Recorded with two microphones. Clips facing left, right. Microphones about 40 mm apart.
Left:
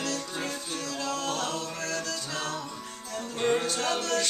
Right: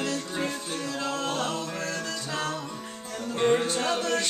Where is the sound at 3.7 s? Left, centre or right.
Right.